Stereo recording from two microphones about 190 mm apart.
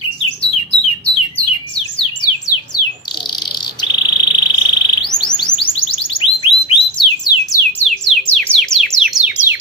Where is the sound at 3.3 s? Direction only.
25° left (ahead or behind).